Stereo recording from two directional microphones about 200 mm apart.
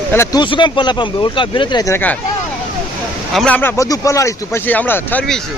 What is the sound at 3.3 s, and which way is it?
Speech, 5° left (ahead or behind).